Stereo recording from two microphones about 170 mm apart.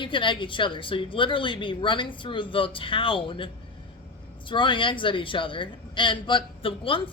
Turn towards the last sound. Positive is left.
turn(degrees=30)  # may be behind; listen again after turning